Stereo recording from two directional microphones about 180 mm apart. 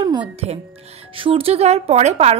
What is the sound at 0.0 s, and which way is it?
A woman's voice, 25° right (ahead or behind).